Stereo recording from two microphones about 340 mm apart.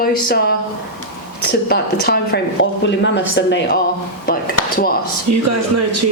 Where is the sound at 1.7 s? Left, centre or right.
Left.